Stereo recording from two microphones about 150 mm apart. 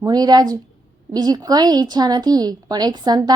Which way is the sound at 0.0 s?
25° right (ahead or behind).